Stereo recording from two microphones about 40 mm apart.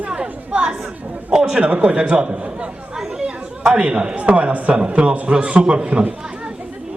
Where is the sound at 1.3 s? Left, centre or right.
Centre.